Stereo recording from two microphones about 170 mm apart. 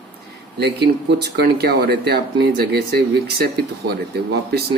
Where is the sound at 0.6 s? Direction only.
75° right (ahead or behind).